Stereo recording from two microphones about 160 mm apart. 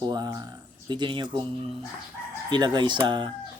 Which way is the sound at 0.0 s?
25° right (ahead or behind).